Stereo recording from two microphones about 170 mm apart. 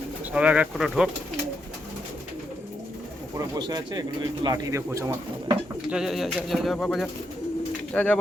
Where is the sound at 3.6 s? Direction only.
25° right (ahead or behind).